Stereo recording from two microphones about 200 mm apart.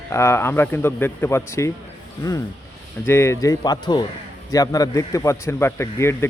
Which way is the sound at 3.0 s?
15° left (ahead or behind).